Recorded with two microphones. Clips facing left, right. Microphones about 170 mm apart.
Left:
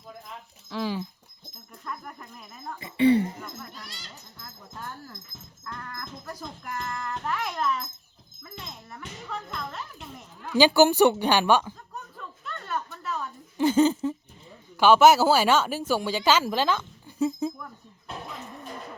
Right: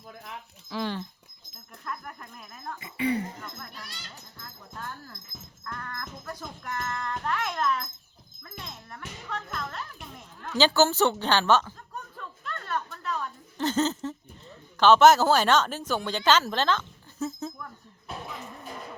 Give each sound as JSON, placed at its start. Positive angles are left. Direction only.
{"t": 0.7, "sound": "speech", "side_deg": 5}
{"t": 2.8, "sound": "speech", "side_deg": 30}
{"t": 3.3, "sound": "speech", "side_deg": 10}
{"t": 5.6, "sound": "speech", "side_deg": 15}
{"t": 8.9, "sound": "speech", "side_deg": 5}
{"t": 10.4, "sound": "speech", "side_deg": 10}
{"t": 12.1, "sound": "a sound", "side_deg": 5}
{"t": 14.8, "sound": "speech", "side_deg": 10}